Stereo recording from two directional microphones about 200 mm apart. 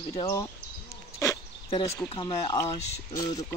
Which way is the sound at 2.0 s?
25° left (ahead or behind).